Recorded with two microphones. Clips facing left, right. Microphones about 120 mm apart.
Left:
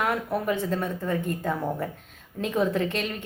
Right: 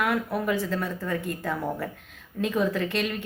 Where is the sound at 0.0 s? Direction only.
25° left (ahead or behind).